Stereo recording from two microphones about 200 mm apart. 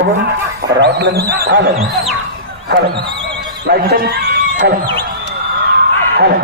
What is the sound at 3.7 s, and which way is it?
Speech, 55° right (ahead or behind).